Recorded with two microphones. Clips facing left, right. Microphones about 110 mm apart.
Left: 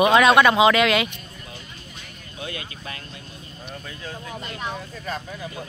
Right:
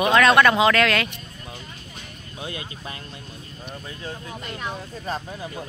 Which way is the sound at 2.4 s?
25° right (ahead or behind).